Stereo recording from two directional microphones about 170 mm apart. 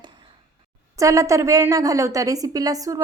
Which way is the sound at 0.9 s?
20° right (ahead or behind).